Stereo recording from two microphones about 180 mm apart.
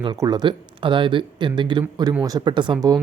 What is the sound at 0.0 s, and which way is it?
Speech, 25° right (ahead or behind).